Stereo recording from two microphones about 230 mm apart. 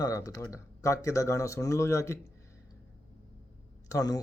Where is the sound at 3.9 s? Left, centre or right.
Centre.